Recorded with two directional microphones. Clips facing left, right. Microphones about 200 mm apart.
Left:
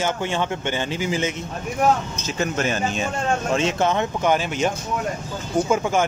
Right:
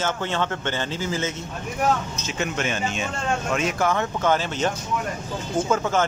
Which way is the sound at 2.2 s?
40° left (ahead or behind).